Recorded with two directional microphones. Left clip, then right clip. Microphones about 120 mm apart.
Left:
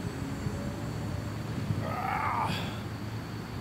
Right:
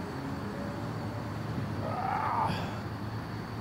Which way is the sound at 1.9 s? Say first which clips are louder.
Even; 20° left (ahead or behind).